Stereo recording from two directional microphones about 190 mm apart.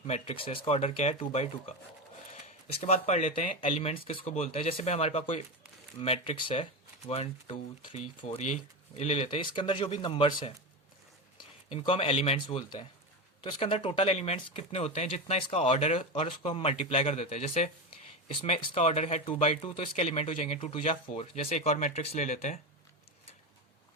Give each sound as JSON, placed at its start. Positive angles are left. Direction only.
{"t": 0.1, "sound": "speech", "side_deg": 30}
{"t": 2.8, "sound": "speech", "side_deg": 35}